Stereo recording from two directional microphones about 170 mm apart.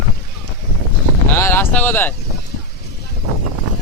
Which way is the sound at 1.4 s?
15° left (ahead or behind).